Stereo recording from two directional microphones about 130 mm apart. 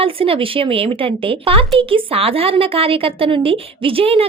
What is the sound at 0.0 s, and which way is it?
A woman's voice, 45° right (ahead or behind).